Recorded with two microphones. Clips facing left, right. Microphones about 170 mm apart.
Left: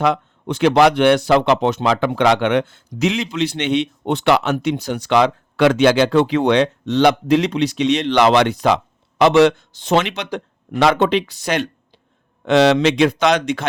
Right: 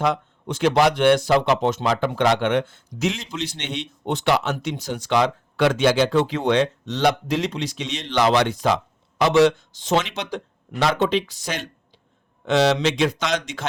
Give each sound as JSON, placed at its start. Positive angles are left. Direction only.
{"t": 0.0, "sound": "a man's voice", "side_deg": 65}